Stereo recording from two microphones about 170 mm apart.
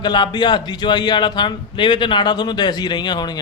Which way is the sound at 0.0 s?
25° left (ahead or behind).